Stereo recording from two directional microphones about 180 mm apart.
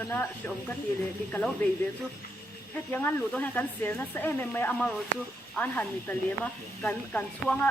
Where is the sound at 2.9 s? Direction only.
10° left (ahead or behind).